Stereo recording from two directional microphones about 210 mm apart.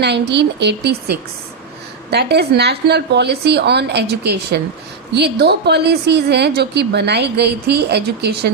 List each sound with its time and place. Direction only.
0.0 s a woman's voice: 55° right (ahead or behind)